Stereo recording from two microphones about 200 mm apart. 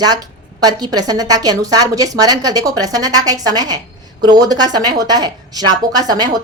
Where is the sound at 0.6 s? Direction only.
20° right (ahead or behind).